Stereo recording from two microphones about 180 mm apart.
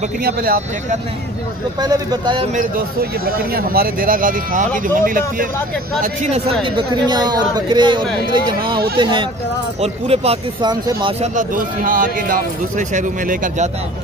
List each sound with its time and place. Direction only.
0.2 s speech: 55° right (ahead or behind)
1.8 s speech: 20° right (ahead or behind)
2.5 s a man's voice: 55° right (ahead or behind)
6.2 s speech: 35° right (ahead or behind)
6.6 s speech: 25° right (ahead or behind)
11.3 s a man's voice: 50° right (ahead or behind)